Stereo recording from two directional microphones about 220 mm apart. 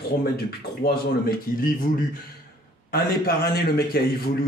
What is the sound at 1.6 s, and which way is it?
Speech, 40° left (ahead or behind).